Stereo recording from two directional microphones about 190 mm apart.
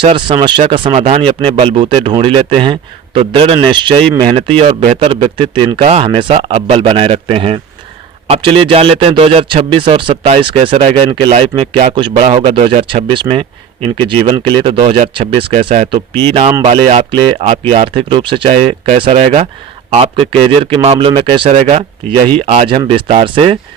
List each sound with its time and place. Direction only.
0.0 s speech: 25° right (ahead or behind)